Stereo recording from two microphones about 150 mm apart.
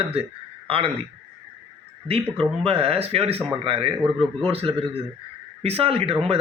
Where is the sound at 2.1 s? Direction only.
40° right (ahead or behind).